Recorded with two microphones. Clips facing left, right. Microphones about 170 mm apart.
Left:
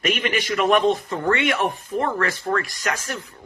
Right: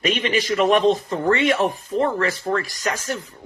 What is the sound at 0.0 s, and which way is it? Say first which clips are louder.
Speech: right 2 dB; 30° right (ahead or behind).